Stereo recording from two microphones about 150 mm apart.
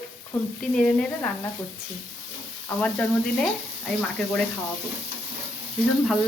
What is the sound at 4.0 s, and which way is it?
Speech, 5° left (ahead or behind).